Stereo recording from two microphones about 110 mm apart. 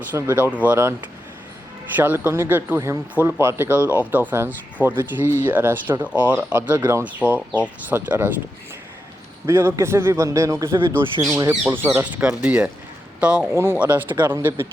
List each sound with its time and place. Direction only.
0.1 s speech: 20° right (ahead or behind)
2.0 s speech: 15° right (ahead or behind)
9.5 s speech: 25° right (ahead or behind)
12.2 s a man's voice: 10° right (ahead or behind)